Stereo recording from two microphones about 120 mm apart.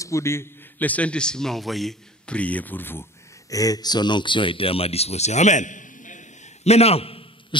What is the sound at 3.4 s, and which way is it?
Speech, 30° left (ahead or behind).